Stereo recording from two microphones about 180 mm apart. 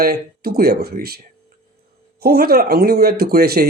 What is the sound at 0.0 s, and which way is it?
Speech, 60° right (ahead or behind).